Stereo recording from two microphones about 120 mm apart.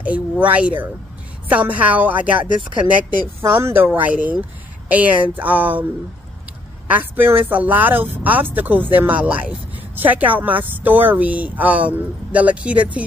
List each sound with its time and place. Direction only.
0.0 s a sound: 10° right (ahead or behind)
1.5 s speech: 15° right (ahead or behind)
2.3 s speech: 90° left
3.3 s speech: 20° right (ahead or behind)
6.9 s speech: 15° right (ahead or behind)